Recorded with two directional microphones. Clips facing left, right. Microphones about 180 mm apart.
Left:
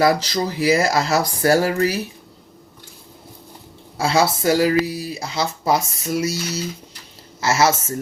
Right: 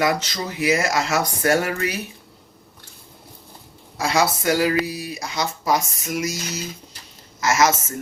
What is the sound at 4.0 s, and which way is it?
Speech, 30° left (ahead or behind).